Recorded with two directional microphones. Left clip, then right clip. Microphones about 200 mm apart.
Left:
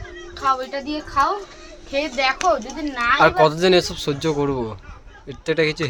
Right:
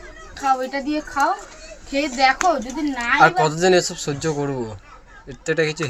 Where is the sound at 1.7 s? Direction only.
15° left (ahead or behind).